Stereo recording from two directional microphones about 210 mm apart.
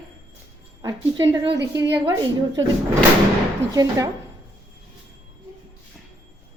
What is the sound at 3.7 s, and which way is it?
Speech, 15° right (ahead or behind).